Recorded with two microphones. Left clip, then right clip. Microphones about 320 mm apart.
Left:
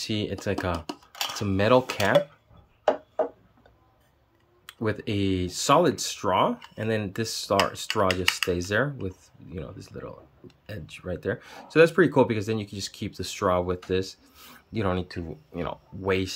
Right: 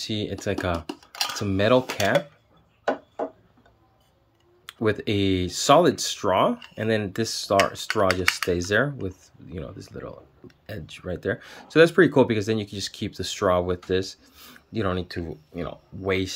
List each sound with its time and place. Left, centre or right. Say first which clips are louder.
0.0 s speech: right 1 dB; centre
4.6 s speech: right 5 dB; centre